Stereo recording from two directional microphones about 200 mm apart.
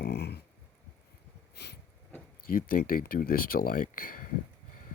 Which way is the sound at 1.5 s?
55° left (ahead or behind).